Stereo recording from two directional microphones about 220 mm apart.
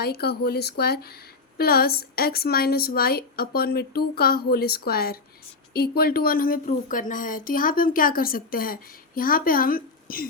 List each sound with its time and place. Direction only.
0.0 s a woman's voice: 45° left (ahead or behind)